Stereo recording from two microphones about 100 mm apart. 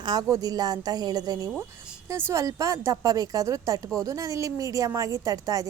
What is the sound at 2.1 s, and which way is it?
Speech, 25° right (ahead or behind).